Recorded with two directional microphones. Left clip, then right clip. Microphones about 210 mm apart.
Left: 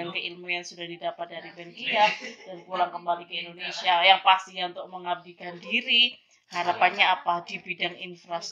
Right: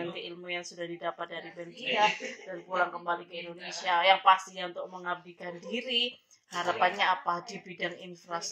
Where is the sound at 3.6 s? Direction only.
30° right (ahead or behind).